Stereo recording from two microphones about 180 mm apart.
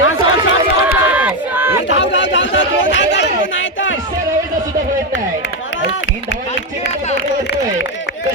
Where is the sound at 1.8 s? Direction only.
85° left.